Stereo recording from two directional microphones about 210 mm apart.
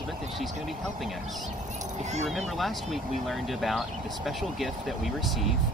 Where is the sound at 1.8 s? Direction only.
35° right (ahead or behind).